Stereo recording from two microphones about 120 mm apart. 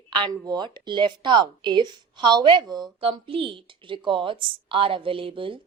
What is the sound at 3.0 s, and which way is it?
A woman's voice, 50° right (ahead or behind).